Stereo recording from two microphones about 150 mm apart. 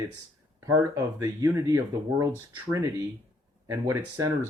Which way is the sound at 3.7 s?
20° right (ahead or behind).